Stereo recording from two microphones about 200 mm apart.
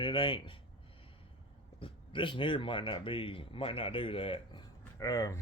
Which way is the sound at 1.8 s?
25° left (ahead or behind).